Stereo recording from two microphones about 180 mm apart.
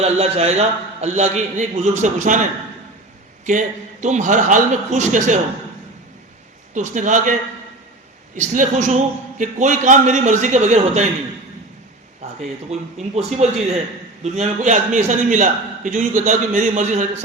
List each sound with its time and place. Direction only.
0.0 s a man's voice: 35° right (ahead or behind)
6.7 s a man's voice: 45° right (ahead or behind)
8.4 s a man's voice: 40° right (ahead or behind)
12.2 s a man's voice: 40° right (ahead or behind)